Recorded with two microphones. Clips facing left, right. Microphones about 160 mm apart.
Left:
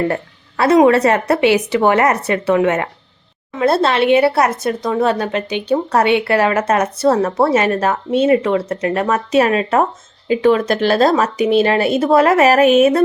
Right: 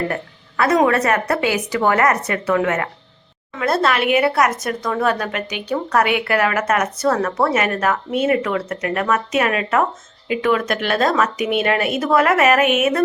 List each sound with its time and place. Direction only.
0.1 s a woman's voice: 30° left (ahead or behind)